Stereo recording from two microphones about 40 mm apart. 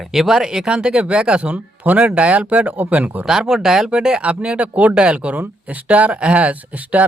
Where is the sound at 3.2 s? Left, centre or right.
Centre; by 4.9 s right.